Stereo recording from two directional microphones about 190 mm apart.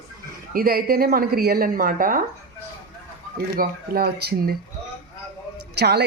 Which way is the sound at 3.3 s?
50° right (ahead or behind).